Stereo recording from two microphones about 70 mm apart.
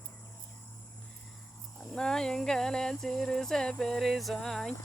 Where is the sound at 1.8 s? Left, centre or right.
Centre.